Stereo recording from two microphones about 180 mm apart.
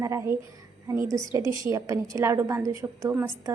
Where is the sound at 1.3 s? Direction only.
15° right (ahead or behind).